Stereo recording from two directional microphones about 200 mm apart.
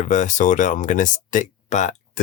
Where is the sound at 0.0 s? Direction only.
35° left (ahead or behind).